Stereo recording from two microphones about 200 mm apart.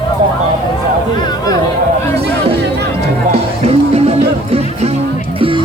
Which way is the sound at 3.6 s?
30° right (ahead or behind).